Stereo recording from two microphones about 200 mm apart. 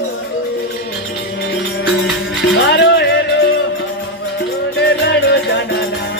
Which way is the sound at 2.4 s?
60° left (ahead or behind).